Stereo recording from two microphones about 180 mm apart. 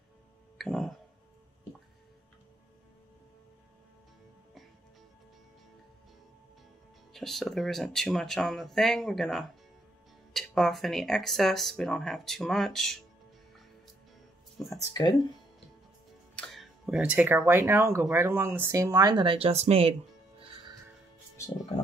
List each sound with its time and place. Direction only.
0.6 s speech: centre (ahead or behind)
7.1 s speech: centre (ahead or behind)
14.7 s speech: 20° left (ahead or behind)
16.3 s speech: centre (ahead or behind); by 20.7 s 30° right (ahead or behind)